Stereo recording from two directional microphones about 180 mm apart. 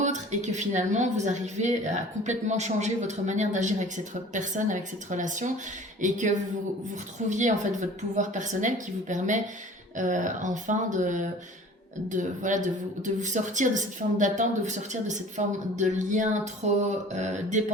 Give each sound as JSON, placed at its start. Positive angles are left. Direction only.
{"t": 0.0, "sound": "a woman's voice", "side_deg": -40}